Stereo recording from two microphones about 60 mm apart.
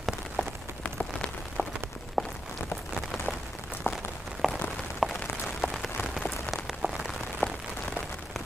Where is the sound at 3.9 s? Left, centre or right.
Left.